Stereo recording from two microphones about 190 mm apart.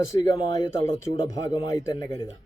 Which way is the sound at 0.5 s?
20° left (ahead or behind).